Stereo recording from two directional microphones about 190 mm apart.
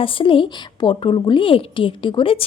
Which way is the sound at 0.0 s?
25° left (ahead or behind).